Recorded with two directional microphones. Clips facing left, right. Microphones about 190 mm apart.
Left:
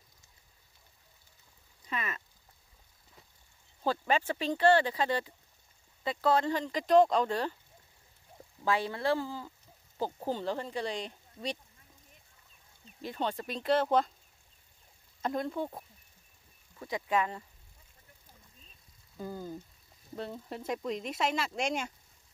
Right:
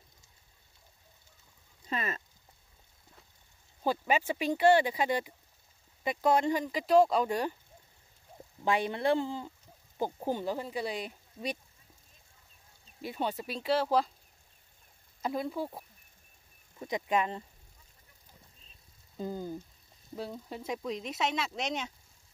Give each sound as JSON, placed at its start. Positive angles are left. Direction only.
{"t": 1.9, "sound": "speech", "side_deg": -30}
{"t": 3.8, "sound": "speech", "side_deg": -10}
{"t": 8.6, "sound": "speech", "side_deg": -20}
{"t": 13.0, "sound": "speech", "side_deg": -10}
{"t": 15.2, "sound": "speech", "side_deg": -5}
{"t": 16.8, "sound": "speech", "side_deg": -20}
{"t": 19.1, "sound": "speech", "side_deg": -20}
{"t": 20.2, "sound": "speech", "side_deg": 0}